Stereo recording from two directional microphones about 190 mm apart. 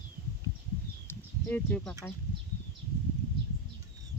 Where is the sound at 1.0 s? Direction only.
10° left (ahead or behind).